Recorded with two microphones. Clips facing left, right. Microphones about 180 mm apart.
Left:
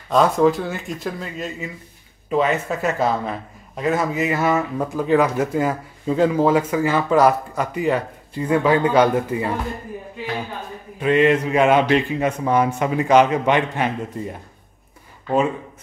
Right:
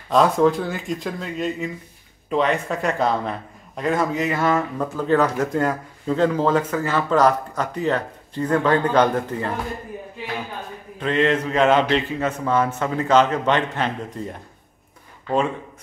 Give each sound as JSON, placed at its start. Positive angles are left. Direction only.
{"t": 0.1, "sound": "a man's voice", "side_deg": 0}
{"t": 11.0, "sound": "a man's voice", "side_deg": 10}